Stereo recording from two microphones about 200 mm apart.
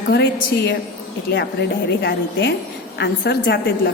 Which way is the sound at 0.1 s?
60° left (ahead or behind).